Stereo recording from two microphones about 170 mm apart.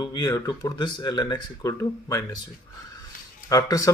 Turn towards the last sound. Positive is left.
turn(degrees=20)  # may be behind; listen again after turning